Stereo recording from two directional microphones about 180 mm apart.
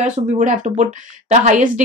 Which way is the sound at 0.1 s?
45° right (ahead or behind).